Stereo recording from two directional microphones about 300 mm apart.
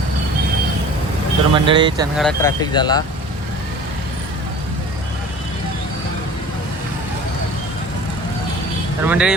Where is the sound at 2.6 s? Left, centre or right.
Centre.